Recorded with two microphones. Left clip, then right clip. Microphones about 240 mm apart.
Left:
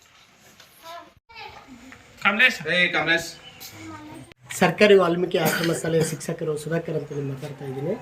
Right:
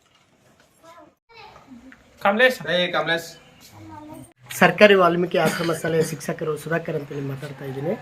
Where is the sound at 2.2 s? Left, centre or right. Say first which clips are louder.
Right 1 dB; right.